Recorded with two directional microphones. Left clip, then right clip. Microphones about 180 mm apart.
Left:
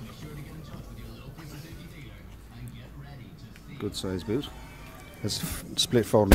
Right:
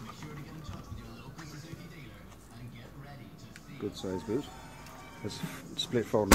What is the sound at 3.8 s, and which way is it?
Speech, 20° left (ahead or behind).